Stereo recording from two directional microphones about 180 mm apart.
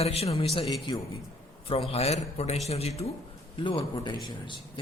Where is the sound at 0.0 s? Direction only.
35° left (ahead or behind).